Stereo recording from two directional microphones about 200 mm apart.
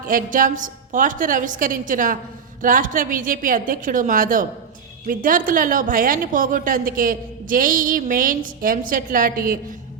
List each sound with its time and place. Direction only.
0.0 s a woman's voice: 45° right (ahead or behind)